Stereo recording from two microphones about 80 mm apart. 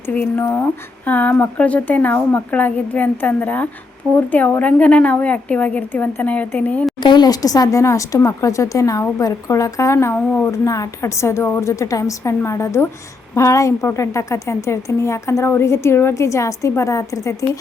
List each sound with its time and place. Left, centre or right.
0.1 s a woman's voice: left
7.0 s a woman's voice: left